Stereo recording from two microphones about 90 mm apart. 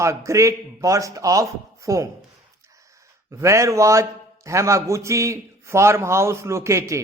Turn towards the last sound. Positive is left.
turn(degrees=-35)  # may be behind; listen again after turning